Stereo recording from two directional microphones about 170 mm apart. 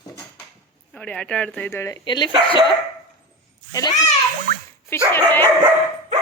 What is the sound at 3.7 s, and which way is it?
Speech, 20° left (ahead or behind).